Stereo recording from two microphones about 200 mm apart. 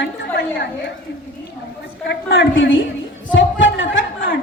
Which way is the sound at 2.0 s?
65° left (ahead or behind).